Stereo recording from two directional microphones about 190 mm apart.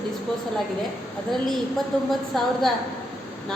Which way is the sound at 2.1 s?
Centre (ahead or behind).